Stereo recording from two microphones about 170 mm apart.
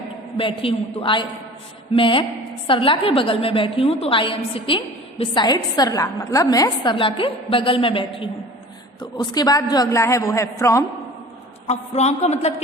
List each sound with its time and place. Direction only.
0.3 s a woman's voice: 30° left (ahead or behind)
11.7 s a woman's voice: 40° left (ahead or behind)